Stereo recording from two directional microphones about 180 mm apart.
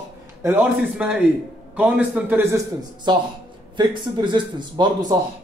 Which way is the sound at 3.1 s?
25° right (ahead or behind).